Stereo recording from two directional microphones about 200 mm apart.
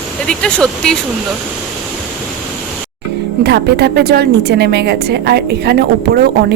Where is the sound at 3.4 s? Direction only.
55° right (ahead or behind).